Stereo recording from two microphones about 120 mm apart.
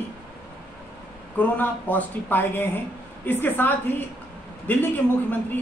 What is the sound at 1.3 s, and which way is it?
A woman's voice, 15° left (ahead or behind).